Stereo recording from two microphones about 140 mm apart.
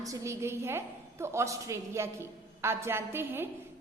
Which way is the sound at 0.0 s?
20° right (ahead or behind).